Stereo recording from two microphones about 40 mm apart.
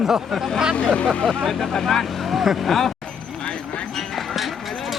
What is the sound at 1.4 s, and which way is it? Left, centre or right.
Speech, centre.